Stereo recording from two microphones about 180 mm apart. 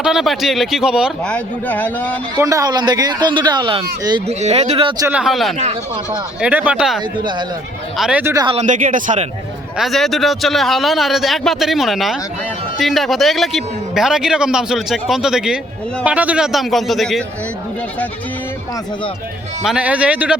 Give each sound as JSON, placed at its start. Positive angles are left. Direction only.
{"t": 0.0, "sound": "a man's voice", "side_deg": 0}
{"t": 1.3, "sound": "a man's voice", "side_deg": 10}
{"t": 2.4, "sound": "speech", "side_deg": -20}
{"t": 5.0, "sound": "a man's voice", "side_deg": -5}
{"t": 8.2, "sound": "a man's voice", "side_deg": -15}
{"t": 8.6, "sound": "speech", "side_deg": -45}
{"t": 9.7, "sound": "a man's voice", "side_deg": 0}
{"t": 19.6, "sound": "a man's voice", "side_deg": -5}